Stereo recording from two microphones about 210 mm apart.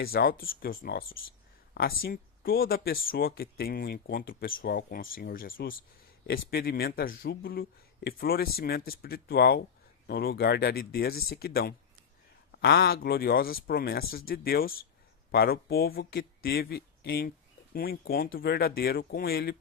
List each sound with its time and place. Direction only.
0.0 s speech: 45° left (ahead or behind)